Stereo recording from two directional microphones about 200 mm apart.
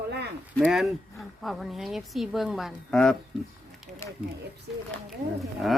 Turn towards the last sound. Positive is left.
turn(degrees=0)  # may be behind; listen again after turning